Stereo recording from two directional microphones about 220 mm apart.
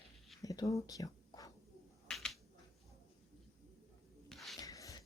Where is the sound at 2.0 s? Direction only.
Centre (ahead or behind).